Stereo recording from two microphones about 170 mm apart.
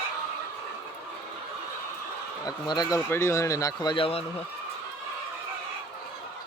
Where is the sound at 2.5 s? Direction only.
25° left (ahead or behind).